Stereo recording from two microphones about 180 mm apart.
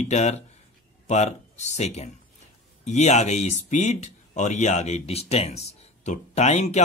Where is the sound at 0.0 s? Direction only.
40° left (ahead or behind).